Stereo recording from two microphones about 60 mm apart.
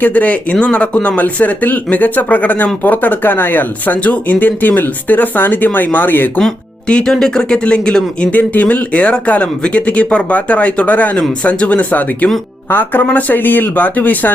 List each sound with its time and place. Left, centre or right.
0.0 s speech: left
6.8 s speech: centre
8.3 s speech: left